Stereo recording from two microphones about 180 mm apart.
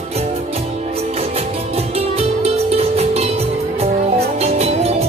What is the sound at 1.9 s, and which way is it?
Music, 35° right (ahead or behind).